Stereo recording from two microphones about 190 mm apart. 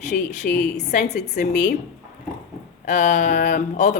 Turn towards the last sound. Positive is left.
turn(degrees=40)  # may be behind; listen again after turning